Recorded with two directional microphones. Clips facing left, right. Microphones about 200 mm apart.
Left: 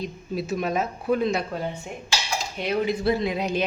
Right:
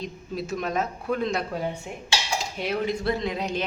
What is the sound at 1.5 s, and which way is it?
A man's voice, 10° right (ahead or behind).